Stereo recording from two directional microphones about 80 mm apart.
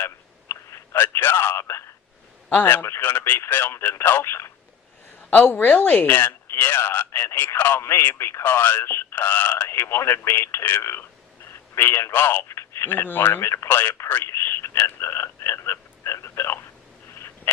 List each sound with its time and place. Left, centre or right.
0.0 s telephone: left
2.5 s speech: left
17.2 s a sound: left